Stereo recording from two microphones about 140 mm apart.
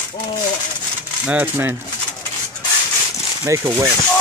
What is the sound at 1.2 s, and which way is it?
Speech, 10° right (ahead or behind).